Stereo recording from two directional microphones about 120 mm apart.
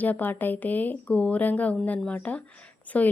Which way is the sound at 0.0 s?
15° left (ahead or behind).